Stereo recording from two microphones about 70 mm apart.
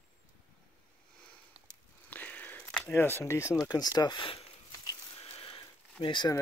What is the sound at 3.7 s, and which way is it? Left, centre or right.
Speech, left.